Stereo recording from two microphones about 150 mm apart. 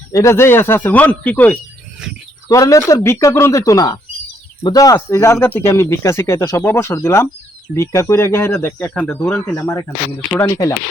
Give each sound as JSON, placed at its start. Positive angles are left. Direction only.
{"t": 0.1, "sound": "speech", "side_deg": 20}
{"t": 2.5, "sound": "speech", "side_deg": 20}